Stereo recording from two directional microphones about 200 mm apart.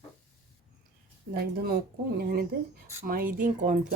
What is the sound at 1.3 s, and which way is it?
Speech, 50° right (ahead or behind).